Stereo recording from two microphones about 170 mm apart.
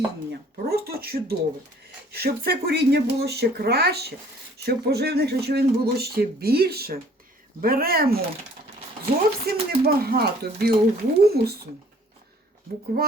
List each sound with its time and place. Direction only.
0.3 s speech: 65° right (ahead or behind)
9.5 s speech: 65° right (ahead or behind)
12.9 s speech: 65° right (ahead or behind)